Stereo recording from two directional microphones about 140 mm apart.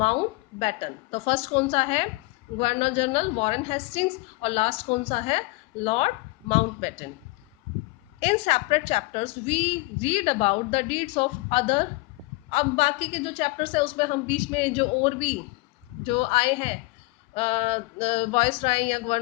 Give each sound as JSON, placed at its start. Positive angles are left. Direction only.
{"t": 0.6, "sound": "a woman's voice", "side_deg": 45}
{"t": 8.2, "sound": "a woman's voice", "side_deg": 45}